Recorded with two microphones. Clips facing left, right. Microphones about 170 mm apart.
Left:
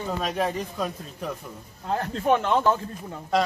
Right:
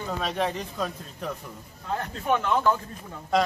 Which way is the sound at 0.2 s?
5° left (ahead or behind).